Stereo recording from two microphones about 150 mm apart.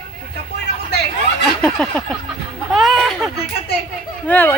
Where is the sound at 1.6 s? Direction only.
5° left (ahead or behind).